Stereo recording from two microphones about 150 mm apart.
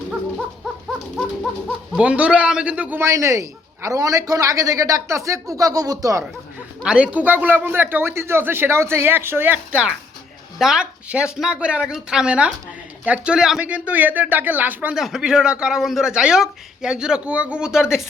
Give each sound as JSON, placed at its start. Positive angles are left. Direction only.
{"t": 2.0, "sound": "a man's voice", "side_deg": -5}
{"t": 6.8, "sound": "a man's voice", "side_deg": -5}